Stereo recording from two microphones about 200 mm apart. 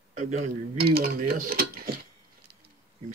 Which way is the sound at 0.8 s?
50° right (ahead or behind).